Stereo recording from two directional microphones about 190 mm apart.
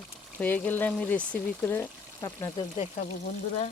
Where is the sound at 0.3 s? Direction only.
10° left (ahead or behind).